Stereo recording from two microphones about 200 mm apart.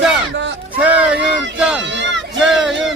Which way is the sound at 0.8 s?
5° right (ahead or behind).